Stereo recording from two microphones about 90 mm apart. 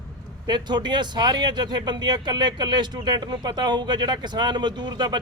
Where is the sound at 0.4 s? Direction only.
55° right (ahead or behind).